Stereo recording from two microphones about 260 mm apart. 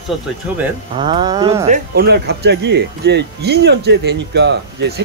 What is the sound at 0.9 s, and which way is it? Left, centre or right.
Speech, centre.